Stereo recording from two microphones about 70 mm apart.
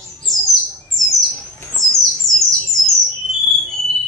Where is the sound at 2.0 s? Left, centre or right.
Centre.